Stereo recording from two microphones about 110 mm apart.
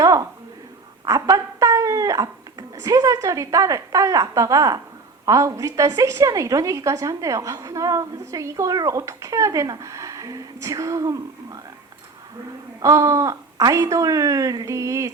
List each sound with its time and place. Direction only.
0.0 s a sound: 30° right (ahead or behind)
1.0 s a woman's voice: 30° right (ahead or behind)
12.8 s a woman's voice: 30° right (ahead or behind)